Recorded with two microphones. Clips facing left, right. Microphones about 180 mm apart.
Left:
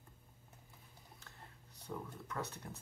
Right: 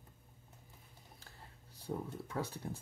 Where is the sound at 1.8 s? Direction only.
30° right (ahead or behind).